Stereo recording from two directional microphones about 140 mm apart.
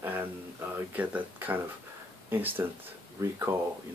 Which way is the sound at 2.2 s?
15° right (ahead or behind).